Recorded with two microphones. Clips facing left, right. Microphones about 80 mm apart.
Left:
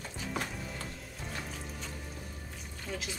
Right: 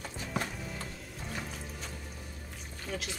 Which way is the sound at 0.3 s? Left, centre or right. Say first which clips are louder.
Right 1 dB; centre.